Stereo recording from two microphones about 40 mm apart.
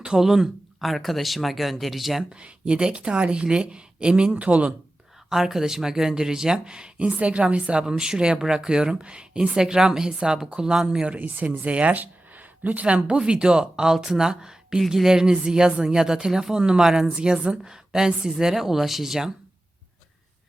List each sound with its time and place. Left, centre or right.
0.0 s speech: centre
0.8 s speech: centre
2.3 s speech: right
5.3 s speech: centre
11.2 s speech: right
12.8 s speech: right; by 19.3 s centre